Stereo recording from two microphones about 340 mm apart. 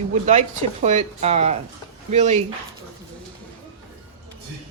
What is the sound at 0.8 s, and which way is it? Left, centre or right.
A woman's voice, centre.